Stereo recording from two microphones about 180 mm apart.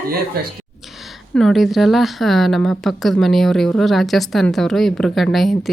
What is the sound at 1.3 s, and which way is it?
A woman's voice, centre (ahead or behind).